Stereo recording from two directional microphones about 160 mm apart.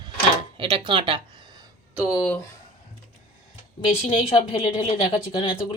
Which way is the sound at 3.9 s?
40° left (ahead or behind).